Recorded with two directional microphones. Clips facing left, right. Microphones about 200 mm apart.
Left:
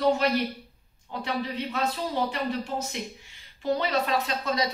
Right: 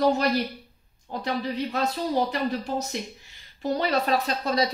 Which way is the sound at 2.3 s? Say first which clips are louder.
Right 2 dB; 40° right (ahead or behind).